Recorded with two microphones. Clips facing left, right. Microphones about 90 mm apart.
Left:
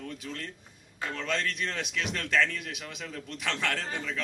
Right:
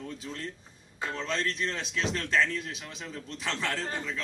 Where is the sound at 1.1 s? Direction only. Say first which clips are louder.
Even; 30° right (ahead or behind).